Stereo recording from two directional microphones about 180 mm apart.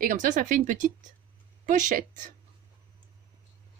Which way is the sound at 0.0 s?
45° right (ahead or behind).